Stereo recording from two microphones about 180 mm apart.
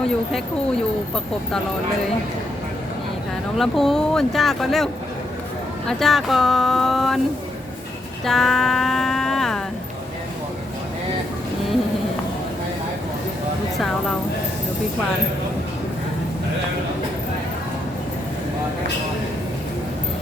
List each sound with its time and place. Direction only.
3.6 s speech: centre (ahead or behind)
5.9 s speech: centre (ahead or behind)
8.2 s a sound: centre (ahead or behind)